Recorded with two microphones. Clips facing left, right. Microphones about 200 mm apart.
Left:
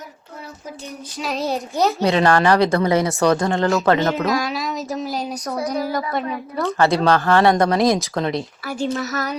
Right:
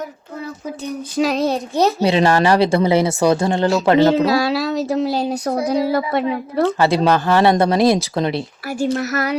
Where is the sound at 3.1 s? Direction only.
10° right (ahead or behind); by 5.9 s 30° right (ahead or behind).